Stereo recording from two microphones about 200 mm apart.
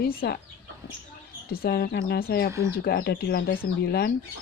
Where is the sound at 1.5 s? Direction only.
50° left (ahead or behind).